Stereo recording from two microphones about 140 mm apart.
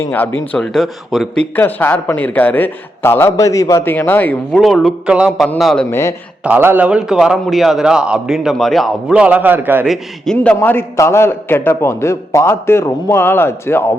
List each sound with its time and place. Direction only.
0.0 s a man's voice: 15° left (ahead or behind)
1.5 s a man's voice: 15° left (ahead or behind)
4.5 s a man's voice: centre (ahead or behind)
5.5 s a man's voice: 5° left (ahead or behind)
5.9 s speech: 20° left (ahead or behind)
6.4 s a man's voice: 15° right (ahead or behind)
9.8 s a man's voice: centre (ahead or behind)
10.3 s a man's voice: 10° left (ahead or behind)